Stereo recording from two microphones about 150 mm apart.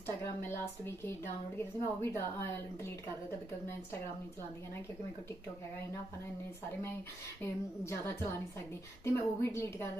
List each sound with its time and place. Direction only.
0.3 s a woman's voice: 15° left (ahead or behind)
7.4 s a woman's voice: 15° left (ahead or behind)